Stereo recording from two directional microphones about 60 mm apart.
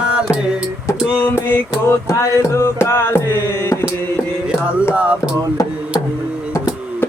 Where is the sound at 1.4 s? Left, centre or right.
Left.